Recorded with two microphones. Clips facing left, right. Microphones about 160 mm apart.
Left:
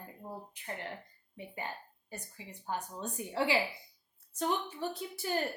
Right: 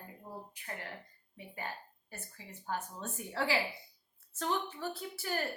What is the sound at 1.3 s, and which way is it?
A woman's voice, 20° left (ahead or behind).